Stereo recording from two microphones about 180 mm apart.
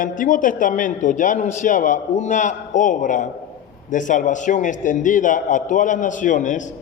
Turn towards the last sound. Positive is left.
turn(degrees=45)  # may be behind; listen again after turning